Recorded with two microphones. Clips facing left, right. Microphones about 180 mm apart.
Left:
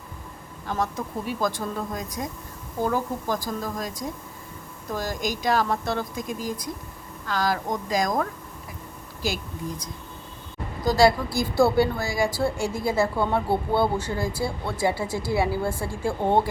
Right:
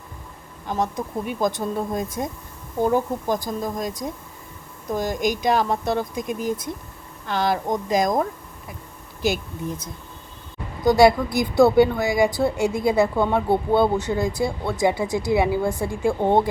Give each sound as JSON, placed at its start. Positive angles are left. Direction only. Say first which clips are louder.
{"t": 0.7, "sound": "speech", "louder": "right 3 dB", "side_deg": -20}
{"t": 10.8, "sound": "speech", "louder": "right 4 dB", "side_deg": -20}